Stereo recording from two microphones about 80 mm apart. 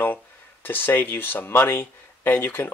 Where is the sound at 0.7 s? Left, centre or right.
Left.